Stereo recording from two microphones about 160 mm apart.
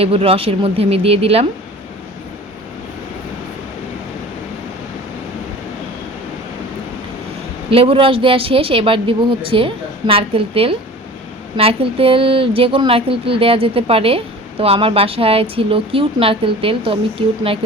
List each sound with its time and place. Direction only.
0.0 s speech: 35° right (ahead or behind)
7.7 s speech: 35° right (ahead or behind)